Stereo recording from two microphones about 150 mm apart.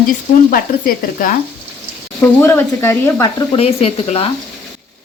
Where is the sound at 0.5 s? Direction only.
70° left (ahead or behind).